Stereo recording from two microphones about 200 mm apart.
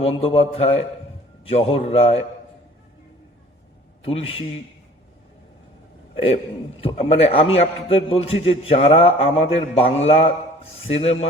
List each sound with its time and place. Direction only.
0.0 s a man's voice: 30° left (ahead or behind)
4.0 s a man's voice: 30° left (ahead or behind)
6.8 s a man's voice: 30° left (ahead or behind)